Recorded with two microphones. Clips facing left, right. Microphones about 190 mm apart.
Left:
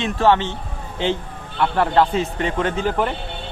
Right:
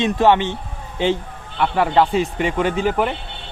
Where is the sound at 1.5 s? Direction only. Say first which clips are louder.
Right 1 dB; 10° right (ahead or behind).